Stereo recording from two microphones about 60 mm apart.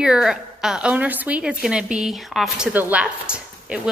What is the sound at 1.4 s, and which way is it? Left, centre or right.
Speech, centre.